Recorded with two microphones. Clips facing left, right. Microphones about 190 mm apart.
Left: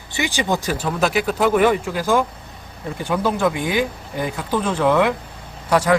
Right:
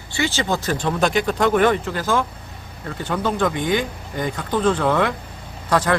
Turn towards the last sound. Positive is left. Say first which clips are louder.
# left 2 dB
turn(degrees=10)  # may be behind; listen again after turning